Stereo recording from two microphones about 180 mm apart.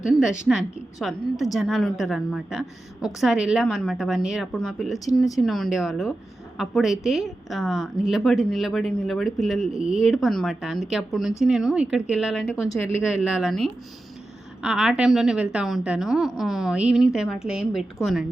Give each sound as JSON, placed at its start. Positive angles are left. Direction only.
{"t": 0.2, "sound": "a woman's voice", "side_deg": 0}
{"t": 12.6, "sound": "speech", "side_deg": 20}
{"t": 13.0, "sound": "a woman's voice", "side_deg": -5}